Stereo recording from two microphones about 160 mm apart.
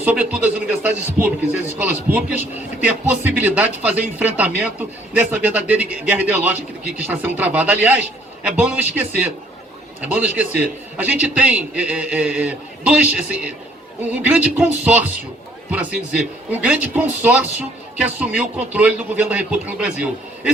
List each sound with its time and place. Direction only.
0.0 s speech: 10° right (ahead or behind)